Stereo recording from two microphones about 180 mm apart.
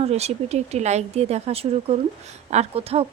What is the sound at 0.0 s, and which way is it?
Speech, 35° right (ahead or behind).